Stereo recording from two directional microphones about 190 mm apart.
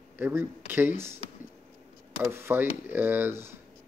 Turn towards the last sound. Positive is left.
turn(degrees=-10)  # may be behind; listen again after turning